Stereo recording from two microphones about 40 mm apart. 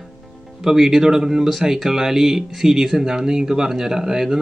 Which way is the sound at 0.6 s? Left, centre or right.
Centre.